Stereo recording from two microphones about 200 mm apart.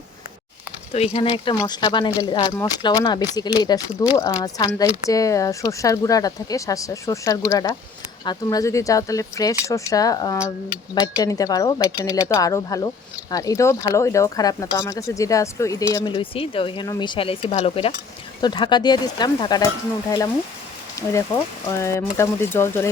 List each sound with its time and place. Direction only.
0.9 s speech: 30° left (ahead or behind)
11.8 s speech: 5° right (ahead or behind)
12.3 s speech: 15° left (ahead or behind)